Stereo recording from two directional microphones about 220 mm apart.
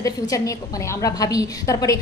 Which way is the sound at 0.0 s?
15° left (ahead or behind).